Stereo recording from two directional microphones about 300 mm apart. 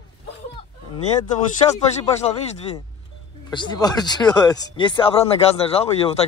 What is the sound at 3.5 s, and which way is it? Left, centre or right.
Speech, centre.